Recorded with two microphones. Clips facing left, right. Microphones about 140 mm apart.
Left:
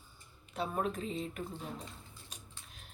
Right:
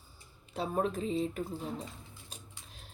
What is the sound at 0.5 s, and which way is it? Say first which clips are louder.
Speech: right 3 dB; 35° right (ahead or behind).